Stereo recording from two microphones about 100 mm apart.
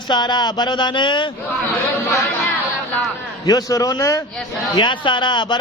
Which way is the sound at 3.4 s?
40° left (ahead or behind).